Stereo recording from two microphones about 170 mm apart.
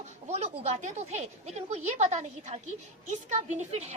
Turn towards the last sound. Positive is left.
turn(degrees=-40)  # may be behind; listen again after turning